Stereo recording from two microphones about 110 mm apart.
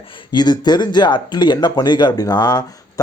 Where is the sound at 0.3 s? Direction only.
40° left (ahead or behind).